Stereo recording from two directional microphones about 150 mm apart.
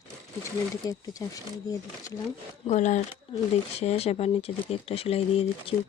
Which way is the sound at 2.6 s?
55° left (ahead or behind).